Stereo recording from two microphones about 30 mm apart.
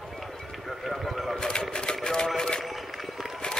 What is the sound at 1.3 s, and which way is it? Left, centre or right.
Bird, left.